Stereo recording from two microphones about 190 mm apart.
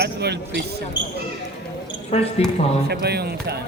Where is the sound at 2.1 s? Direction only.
30° left (ahead or behind).